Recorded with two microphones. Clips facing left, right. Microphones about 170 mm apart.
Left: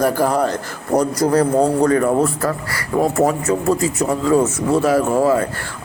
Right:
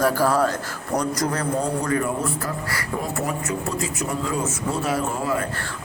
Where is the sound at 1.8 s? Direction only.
60° left (ahead or behind).